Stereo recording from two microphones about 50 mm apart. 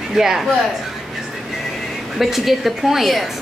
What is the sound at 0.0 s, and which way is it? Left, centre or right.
Speech, centre.